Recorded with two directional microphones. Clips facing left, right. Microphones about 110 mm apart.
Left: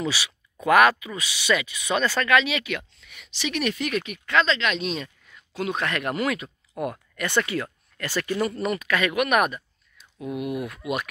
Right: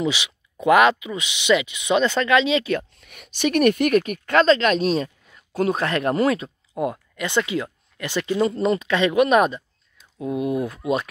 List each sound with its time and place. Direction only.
0.0 s speech: 20° right (ahead or behind)
3.0 s speech: 50° right (ahead or behind); by 11.1 s 30° right (ahead or behind)